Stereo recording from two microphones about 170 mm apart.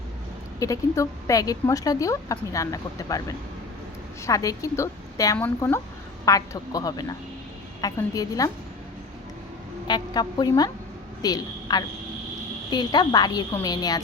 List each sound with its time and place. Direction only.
0.6 s speech: 20° left (ahead or behind)
9.8 s a woman's voice: 25° left (ahead or behind)